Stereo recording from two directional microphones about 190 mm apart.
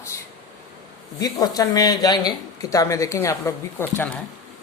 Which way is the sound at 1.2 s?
20° left (ahead or behind).